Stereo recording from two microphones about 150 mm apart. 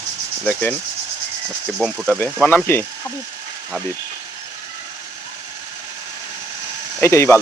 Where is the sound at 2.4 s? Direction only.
15° left (ahead or behind).